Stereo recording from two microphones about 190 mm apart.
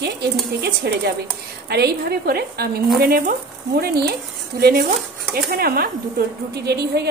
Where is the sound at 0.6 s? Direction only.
55° right (ahead or behind).